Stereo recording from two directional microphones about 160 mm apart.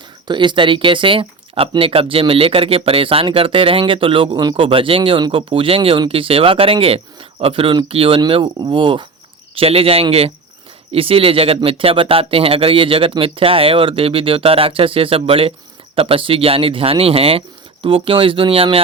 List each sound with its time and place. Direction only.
0.3 s speech: 30° right (ahead or behind)